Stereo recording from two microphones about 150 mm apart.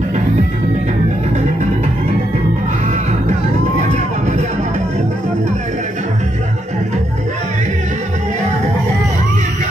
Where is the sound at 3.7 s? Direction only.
50° right (ahead or behind).